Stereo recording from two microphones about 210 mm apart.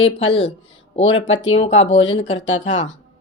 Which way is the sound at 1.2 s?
65° left (ahead or behind).